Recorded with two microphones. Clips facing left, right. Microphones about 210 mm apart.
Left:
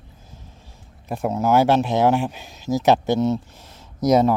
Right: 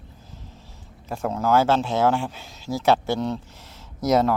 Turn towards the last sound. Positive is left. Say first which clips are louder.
# left 3 dB
turn(degrees=15)  # may be behind; listen again after turning